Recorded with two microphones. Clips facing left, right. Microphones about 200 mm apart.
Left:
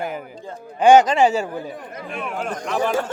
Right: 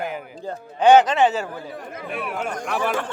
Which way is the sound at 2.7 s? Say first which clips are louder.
Left 3 dB; 40° left (ahead or behind).